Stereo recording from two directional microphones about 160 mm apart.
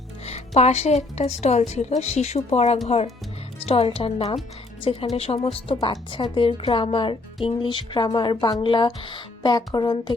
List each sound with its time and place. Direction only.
0.3 s a woman's voice: 40° left (ahead or behind)